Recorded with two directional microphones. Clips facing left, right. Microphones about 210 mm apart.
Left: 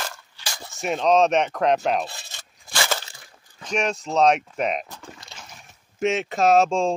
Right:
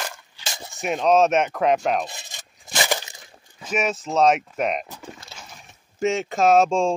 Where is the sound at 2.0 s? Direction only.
15° right (ahead or behind).